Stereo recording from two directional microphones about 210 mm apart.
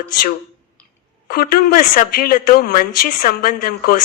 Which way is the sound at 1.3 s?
45° left (ahead or behind).